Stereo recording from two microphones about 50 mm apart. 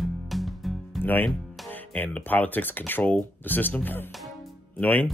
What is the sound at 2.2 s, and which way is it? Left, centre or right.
Speech, left.